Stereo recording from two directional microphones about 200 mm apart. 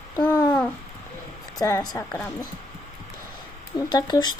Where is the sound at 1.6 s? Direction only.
15° left (ahead or behind).